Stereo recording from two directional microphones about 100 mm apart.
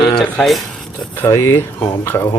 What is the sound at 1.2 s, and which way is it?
Speech, 25° left (ahead or behind).